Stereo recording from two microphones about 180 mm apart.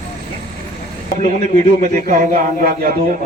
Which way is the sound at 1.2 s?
40° right (ahead or behind).